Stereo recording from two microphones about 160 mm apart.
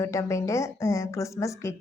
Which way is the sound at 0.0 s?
20° left (ahead or behind).